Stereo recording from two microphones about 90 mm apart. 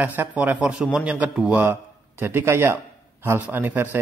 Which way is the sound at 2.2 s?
25° right (ahead or behind).